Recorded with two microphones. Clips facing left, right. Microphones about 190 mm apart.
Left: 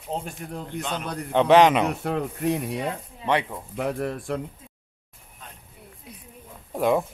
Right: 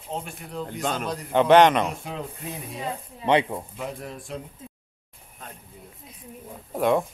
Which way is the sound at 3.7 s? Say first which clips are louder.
Left 7 dB; 65° left (ahead or behind).